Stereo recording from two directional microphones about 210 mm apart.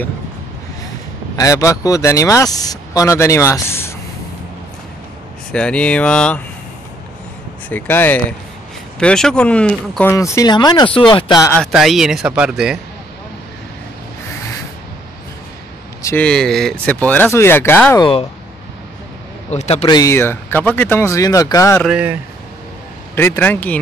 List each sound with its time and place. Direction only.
1.3 s speech: 15° left (ahead or behind)
5.5 s speech: 5° left (ahead or behind)
7.7 s speech: 10° left (ahead or behind)
11.6 s speech: centre (ahead or behind)
16.0 s speech: 10° left (ahead or behind)
19.5 s speech: 30° left (ahead or behind)
20.0 s speech: 10° left (ahead or behind)
21.8 s speech: 5° right (ahead or behind)
23.1 s speech: 10° left (ahead or behind)